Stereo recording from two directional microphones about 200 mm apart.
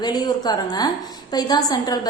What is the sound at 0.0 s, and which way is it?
A woman's voice, 20° left (ahead or behind).